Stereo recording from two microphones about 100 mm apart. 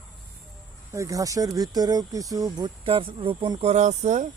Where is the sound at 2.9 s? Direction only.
60° right (ahead or behind).